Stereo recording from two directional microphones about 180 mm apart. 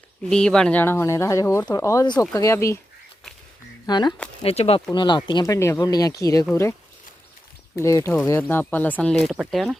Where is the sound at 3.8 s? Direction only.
25° left (ahead or behind).